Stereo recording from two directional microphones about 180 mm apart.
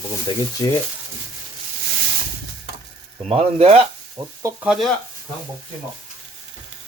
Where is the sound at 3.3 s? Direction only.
35° right (ahead or behind).